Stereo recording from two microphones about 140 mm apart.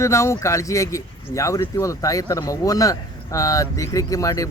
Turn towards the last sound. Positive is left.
turn(degrees=25)  # may be behind; listen again after turning